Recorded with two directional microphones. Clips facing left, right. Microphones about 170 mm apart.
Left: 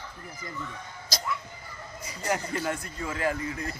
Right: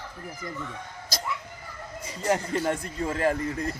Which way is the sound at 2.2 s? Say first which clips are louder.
Right 4 dB; 35° right (ahead or behind).